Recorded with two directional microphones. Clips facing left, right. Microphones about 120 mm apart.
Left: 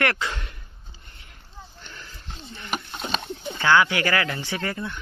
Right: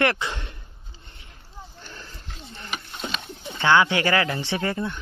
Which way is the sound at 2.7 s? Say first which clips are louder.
Left 4 dB; 35° left (ahead or behind).